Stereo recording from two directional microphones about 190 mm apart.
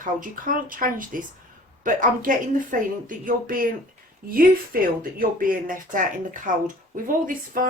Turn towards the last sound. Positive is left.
turn(degrees=-45)  # may be behind; listen again after turning